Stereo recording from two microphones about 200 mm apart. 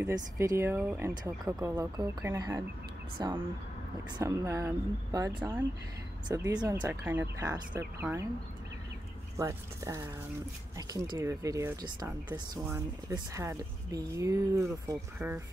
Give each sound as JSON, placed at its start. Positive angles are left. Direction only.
{"t": 0.0, "sound": "speech", "side_deg": -15}
{"t": 9.4, "sound": "speech", "side_deg": -15}